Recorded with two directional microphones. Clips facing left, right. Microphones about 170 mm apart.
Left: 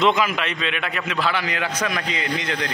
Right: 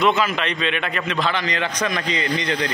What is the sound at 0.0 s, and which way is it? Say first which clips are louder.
A man's voice: even; 15° left (ahead or behind).